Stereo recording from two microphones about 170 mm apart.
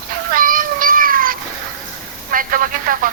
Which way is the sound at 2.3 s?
55° right (ahead or behind).